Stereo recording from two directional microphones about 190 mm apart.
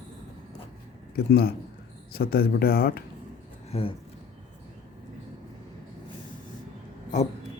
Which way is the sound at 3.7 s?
30° left (ahead or behind).